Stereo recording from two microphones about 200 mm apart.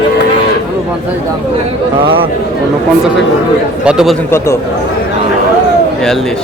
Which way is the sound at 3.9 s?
5° right (ahead or behind).